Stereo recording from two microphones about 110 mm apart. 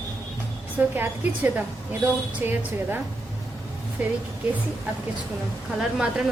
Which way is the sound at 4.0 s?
15° right (ahead or behind).